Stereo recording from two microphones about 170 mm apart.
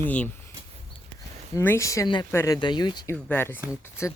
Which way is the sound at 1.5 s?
15° left (ahead or behind).